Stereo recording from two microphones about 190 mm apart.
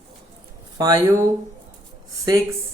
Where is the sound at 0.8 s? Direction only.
20° right (ahead or behind).